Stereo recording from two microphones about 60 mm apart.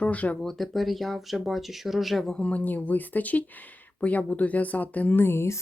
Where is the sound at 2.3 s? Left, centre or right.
Left.